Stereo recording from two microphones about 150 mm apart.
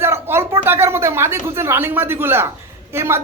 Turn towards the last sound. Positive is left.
turn(degrees=-15)  # may be behind; listen again after turning